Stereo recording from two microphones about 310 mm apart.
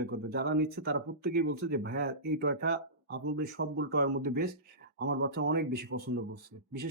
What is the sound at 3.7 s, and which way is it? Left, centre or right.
Speech, right.